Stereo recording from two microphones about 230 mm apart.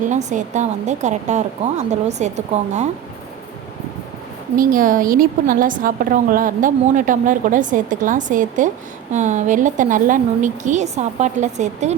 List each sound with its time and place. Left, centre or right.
0.1 s a woman's voice: right
4.5 s a woman's voice: right